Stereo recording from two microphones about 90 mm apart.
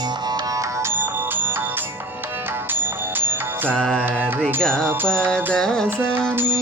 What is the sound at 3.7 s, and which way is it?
Mantra, 10° left (ahead or behind).